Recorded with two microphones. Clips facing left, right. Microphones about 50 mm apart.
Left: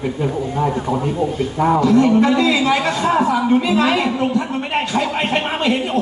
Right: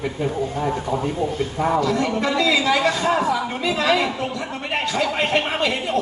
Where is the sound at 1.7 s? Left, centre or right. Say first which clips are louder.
Left 10 dB; left.